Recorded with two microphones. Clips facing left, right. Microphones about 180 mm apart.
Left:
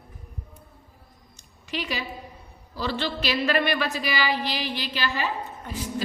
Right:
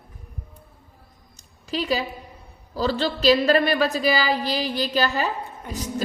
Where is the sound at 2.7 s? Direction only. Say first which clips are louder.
Right 5 dB; 40° right (ahead or behind).